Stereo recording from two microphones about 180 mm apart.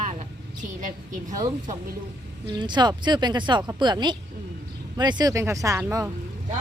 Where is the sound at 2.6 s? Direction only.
25° right (ahead or behind).